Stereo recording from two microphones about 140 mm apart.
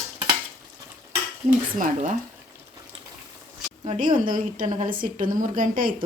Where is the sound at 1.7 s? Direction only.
75° right (ahead or behind).